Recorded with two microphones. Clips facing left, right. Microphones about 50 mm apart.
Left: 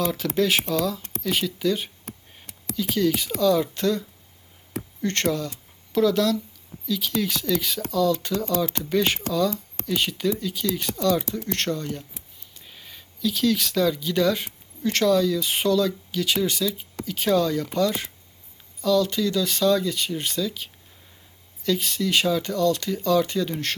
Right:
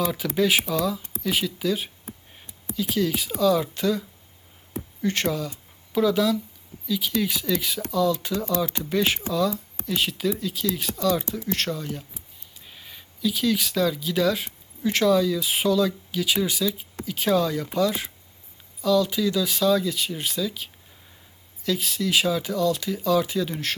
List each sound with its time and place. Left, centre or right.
0.0 s speech: centre
2.0 s a sound: left
2.7 s speech: centre
5.0 s speech: centre